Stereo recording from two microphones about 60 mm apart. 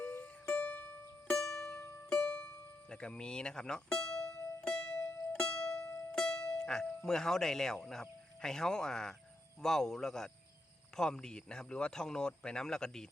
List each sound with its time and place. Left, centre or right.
0.0 s music: left
1.5 s music: left
2.9 s music: centre
7.0 s speech: centre